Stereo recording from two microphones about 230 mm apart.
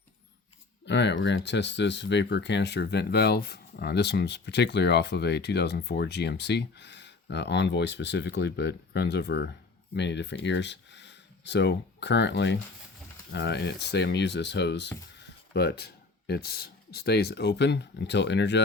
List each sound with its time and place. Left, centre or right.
0.9 s speech: left